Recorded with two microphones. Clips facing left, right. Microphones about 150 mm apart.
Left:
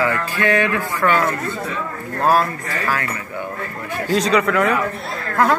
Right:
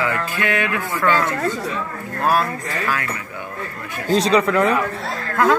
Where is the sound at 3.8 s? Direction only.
25° right (ahead or behind).